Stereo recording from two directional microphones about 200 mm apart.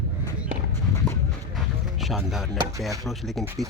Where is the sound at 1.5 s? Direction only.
Centre (ahead or behind).